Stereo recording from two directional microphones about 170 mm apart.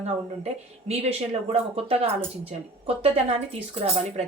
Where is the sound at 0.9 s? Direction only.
35° right (ahead or behind).